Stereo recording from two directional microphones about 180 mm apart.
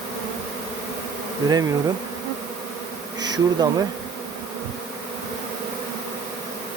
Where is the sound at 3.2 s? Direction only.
20° right (ahead or behind).